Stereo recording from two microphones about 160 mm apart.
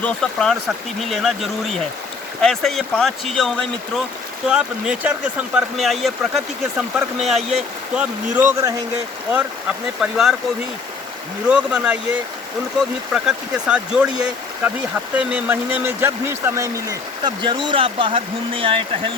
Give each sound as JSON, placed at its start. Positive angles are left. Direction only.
{"t": 0.0, "sound": "speech", "side_deg": 5}
{"t": 11.4, "sound": "speech", "side_deg": -5}
{"t": 13.1, "sound": "speech", "side_deg": -5}